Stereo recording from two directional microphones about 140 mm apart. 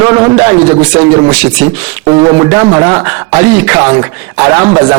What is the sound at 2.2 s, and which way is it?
A man's voice, 25° right (ahead or behind).